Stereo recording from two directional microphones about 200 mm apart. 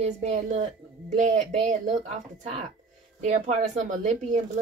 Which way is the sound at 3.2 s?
35° right (ahead or behind).